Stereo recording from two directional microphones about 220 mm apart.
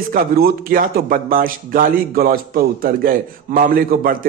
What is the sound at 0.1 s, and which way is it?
A man's voice, 40° right (ahead or behind).